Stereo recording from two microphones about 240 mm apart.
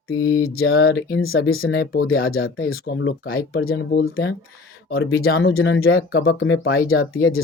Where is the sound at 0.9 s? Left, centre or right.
Left.